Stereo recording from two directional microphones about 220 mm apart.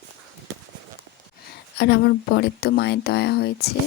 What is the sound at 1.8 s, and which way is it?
Speech, 45° left (ahead or behind).